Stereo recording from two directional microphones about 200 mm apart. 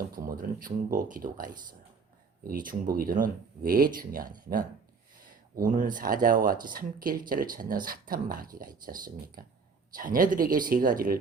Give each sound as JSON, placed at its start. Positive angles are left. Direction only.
{"t": 0.3, "sound": "speech", "side_deg": -45}
{"t": 2.5, "sound": "speech", "side_deg": -45}
{"t": 5.5, "sound": "speech", "side_deg": -45}